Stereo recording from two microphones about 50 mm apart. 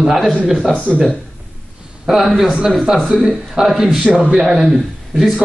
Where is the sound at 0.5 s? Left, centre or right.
Centre.